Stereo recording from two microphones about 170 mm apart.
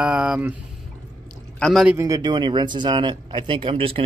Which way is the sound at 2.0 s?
20° right (ahead or behind).